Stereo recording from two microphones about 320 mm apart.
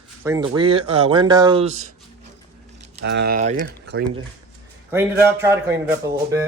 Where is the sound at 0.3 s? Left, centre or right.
Centre.